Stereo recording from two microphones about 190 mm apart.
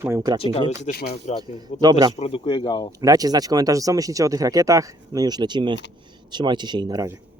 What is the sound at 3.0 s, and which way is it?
Speech, 20° right (ahead or behind).